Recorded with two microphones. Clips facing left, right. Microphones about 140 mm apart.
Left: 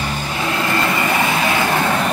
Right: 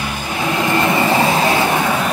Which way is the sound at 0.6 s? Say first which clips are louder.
Right 4 dB; 20° right (ahead or behind).